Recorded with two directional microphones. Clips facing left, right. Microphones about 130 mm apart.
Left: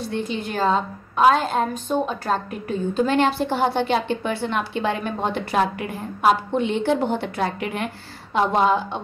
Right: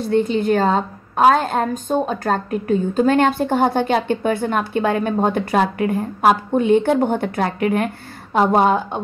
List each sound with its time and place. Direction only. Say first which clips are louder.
0.1 s a woman's voice: right 13 dB; 55° right (ahead or behind)